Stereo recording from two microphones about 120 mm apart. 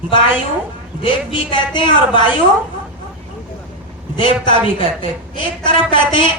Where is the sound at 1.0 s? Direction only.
40° left (ahead or behind).